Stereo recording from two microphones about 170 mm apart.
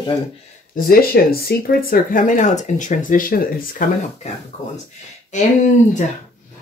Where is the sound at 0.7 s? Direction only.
60° left (ahead or behind).